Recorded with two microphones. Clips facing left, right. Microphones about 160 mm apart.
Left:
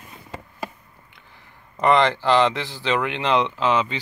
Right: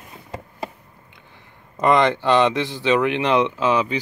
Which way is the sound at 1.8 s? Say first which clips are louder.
Right 1 dB; 20° right (ahead or behind).